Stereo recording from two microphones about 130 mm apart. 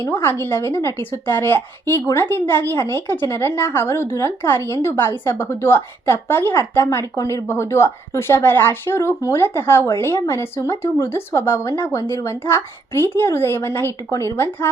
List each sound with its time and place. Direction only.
0.0 s a woman's voice: 15° left (ahead or behind)